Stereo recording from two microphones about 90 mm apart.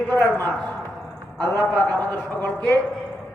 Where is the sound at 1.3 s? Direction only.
45° right (ahead or behind).